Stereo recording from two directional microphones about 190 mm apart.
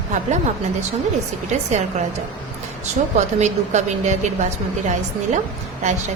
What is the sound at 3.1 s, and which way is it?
A woman's voice, 40° right (ahead or behind).